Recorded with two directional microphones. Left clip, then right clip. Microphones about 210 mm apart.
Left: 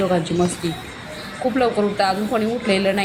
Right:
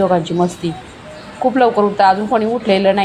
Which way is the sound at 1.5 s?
5° left (ahead or behind).